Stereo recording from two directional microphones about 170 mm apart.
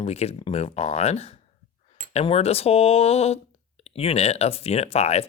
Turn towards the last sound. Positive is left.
turn(degrees=40)  # may be behind; listen again after turning